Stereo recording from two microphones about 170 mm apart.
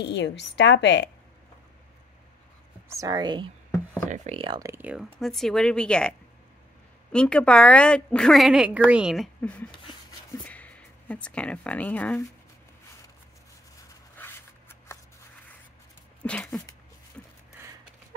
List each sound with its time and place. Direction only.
0.0 s a woman's voice: 90° left
2.9 s speech: 20° right (ahead or behind)
4.1 s speech: 40° right (ahead or behind)
4.6 s speech: 10° right (ahead or behind)
5.2 s a woman's voice: centre (ahead or behind)
14.1 s shuffling cards: 15° left (ahead or behind)
16.2 s a sound: 5° left (ahead or behind)